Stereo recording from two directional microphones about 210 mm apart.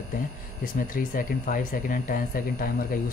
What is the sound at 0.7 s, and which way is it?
Speech, 40° left (ahead or behind).